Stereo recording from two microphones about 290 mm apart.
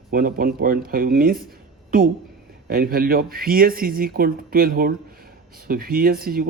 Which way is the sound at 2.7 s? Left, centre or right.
Right.